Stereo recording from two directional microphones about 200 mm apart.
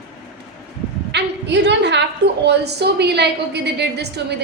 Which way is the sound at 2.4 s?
55° right (ahead or behind).